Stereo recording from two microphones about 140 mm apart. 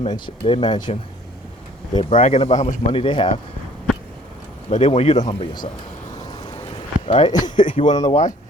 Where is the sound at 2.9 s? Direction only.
40° left (ahead or behind).